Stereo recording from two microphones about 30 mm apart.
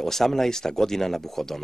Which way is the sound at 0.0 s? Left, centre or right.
Centre.